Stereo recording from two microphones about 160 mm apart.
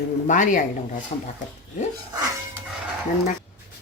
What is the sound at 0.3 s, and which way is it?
Speech, 55° left (ahead or behind).